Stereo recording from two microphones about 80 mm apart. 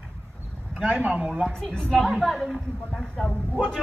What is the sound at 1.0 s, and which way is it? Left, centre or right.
Speech, centre.